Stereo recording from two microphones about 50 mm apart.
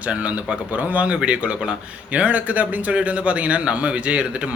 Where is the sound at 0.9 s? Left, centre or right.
Right.